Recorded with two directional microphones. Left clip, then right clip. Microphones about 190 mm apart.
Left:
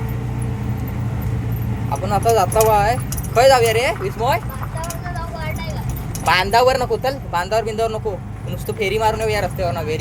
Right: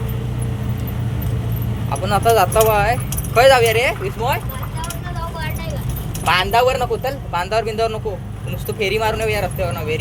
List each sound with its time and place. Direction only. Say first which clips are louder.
1.9 s speech: right 1 dB; 5° left (ahead or behind)
4.0 s a man's voice: left 2 dB; 25° left (ahead or behind)
6.2 s a man's voice: left 1 dB; 20° left (ahead or behind)